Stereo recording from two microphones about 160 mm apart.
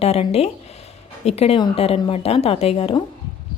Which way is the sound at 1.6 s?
35° left (ahead or behind).